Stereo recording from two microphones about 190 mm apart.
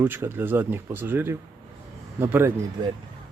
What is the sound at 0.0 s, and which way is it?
Speech, 10° right (ahead or behind).